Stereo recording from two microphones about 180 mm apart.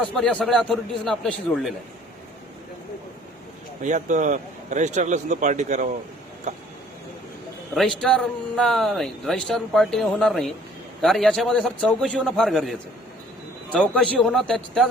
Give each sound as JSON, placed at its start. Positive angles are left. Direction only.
{"t": 0.0, "sound": "speech", "side_deg": 5}
{"t": 3.8, "sound": "speech", "side_deg": -45}
{"t": 7.8, "sound": "speech", "side_deg": 0}
{"t": 13.9, "sound": "speech", "side_deg": 5}